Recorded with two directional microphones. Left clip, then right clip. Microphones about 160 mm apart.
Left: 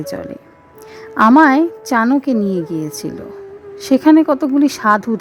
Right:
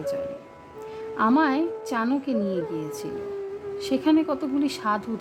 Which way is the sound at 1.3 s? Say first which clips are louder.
Left 13 dB; 60° left (ahead or behind).